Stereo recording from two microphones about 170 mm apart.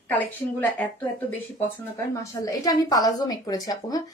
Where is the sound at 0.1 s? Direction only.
10° left (ahead or behind).